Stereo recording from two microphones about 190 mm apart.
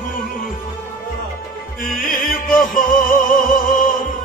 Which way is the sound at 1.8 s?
Centre (ahead or behind).